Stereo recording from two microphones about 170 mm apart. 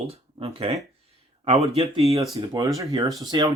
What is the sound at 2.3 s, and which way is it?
Speech, 20° right (ahead or behind).